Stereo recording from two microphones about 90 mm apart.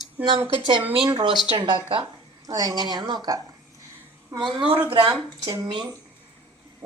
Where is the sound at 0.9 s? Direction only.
60° right (ahead or behind).